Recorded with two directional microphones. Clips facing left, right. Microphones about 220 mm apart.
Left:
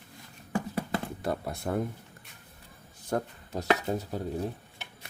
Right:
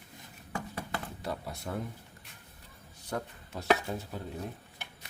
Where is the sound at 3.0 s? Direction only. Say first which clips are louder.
Left 6 dB; 40° left (ahead or behind).